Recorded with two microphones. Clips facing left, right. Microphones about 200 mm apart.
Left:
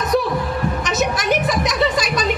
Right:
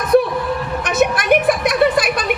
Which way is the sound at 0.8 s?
55° right (ahead or behind).